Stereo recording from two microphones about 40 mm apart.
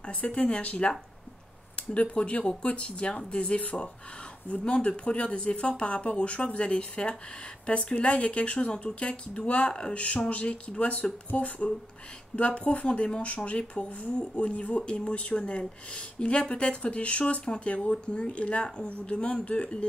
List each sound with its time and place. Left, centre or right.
0.0 s speech: left
14.8 s speech: left